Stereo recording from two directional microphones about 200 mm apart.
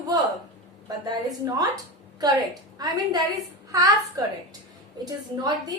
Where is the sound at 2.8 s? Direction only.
20° right (ahead or behind).